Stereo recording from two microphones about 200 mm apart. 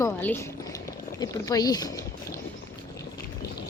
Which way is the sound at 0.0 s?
10° left (ahead or behind).